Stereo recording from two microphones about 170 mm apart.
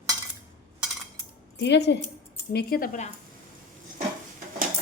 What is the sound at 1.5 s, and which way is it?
Speech, 85° left.